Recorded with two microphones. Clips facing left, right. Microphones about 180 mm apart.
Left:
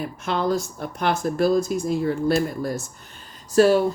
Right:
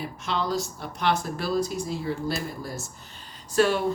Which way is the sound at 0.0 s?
50° left (ahead or behind).